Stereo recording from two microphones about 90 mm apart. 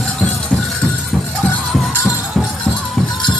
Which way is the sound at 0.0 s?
10° left (ahead or behind).